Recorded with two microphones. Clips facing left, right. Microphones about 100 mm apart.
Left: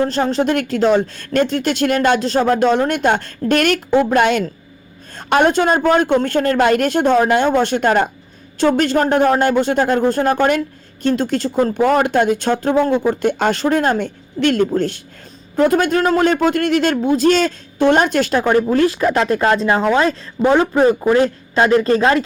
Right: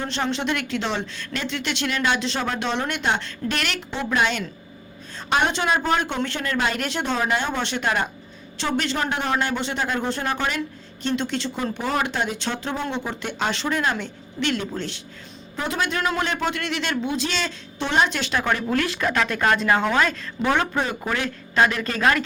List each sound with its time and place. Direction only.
0.0 s a woman's voice: 40° left (ahead or behind)
18.5 s speech: 35° left (ahead or behind)